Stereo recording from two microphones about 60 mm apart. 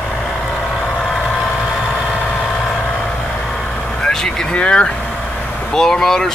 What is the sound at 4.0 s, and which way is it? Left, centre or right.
Vehicle, centre.